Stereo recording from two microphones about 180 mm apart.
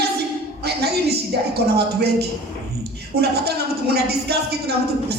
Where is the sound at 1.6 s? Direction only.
65° right (ahead or behind).